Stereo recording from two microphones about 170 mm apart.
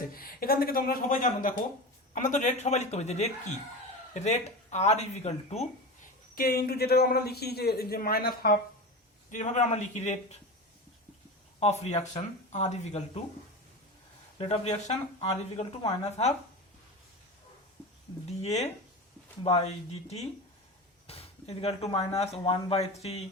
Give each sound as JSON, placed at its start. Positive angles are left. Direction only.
{"t": 0.1, "sound": "a man's voice", "side_deg": 60}
{"t": 6.3, "sound": "a man's voice", "side_deg": 60}
{"t": 9.3, "sound": "speech", "side_deg": 45}
{"t": 11.6, "sound": "speech", "side_deg": 40}
{"t": 14.3, "sound": "speech", "side_deg": 40}
{"t": 18.3, "sound": "speech", "side_deg": 40}